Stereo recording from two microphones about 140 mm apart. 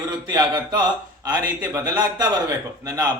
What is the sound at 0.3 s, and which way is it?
A man's voice, 30° right (ahead or behind).